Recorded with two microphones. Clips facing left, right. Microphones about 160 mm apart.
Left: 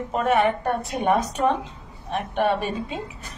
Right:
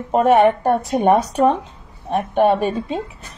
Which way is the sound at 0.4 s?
40° right (ahead or behind).